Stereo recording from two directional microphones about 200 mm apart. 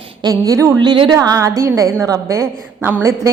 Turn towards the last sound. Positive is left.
turn(degrees=-10)  # may be behind; listen again after turning